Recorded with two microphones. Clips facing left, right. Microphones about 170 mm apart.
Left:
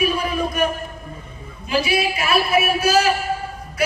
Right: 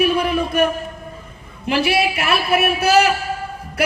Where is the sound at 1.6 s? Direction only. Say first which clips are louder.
Right 2 dB; 65° right (ahead or behind).